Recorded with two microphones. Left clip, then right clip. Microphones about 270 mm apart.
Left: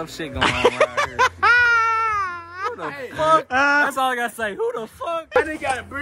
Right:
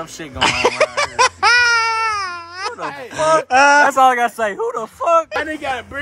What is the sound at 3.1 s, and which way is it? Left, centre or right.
A man's voice, centre.